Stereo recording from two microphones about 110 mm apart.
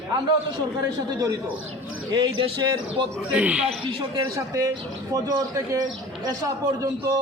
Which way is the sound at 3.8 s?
50° right (ahead or behind).